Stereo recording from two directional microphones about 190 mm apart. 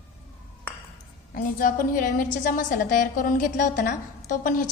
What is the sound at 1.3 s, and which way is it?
A woman's voice, 50° left (ahead or behind).